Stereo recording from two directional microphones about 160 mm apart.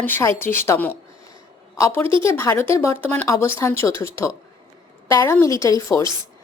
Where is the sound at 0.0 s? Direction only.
15° left (ahead or behind).